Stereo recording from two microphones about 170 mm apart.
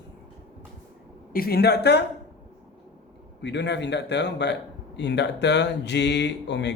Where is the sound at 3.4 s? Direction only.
90° left.